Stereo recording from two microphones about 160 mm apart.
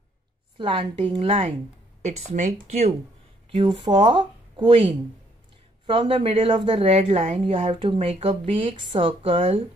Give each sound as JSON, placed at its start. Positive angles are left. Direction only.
{"t": 0.6, "sound": "speech", "side_deg": -30}
{"t": 3.4, "sound": "speech", "side_deg": -30}